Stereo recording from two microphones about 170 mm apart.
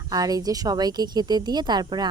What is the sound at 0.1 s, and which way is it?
Speech, 20° right (ahead or behind).